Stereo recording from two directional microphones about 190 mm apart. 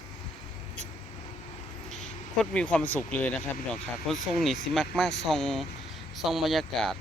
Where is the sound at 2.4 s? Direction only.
5° left (ahead or behind).